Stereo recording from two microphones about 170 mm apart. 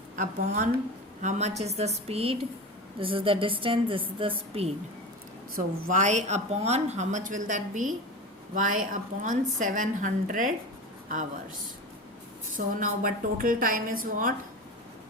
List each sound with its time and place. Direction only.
0.2 s a woman's voice: 50° right (ahead or behind); by 4.7 s 35° right (ahead or behind)
5.5 s a woman's voice: 50° right (ahead or behind)
12.5 s a woman's voice: 55° right (ahead or behind)